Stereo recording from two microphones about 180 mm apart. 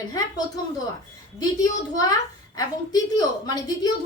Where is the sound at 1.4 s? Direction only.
20° left (ahead or behind).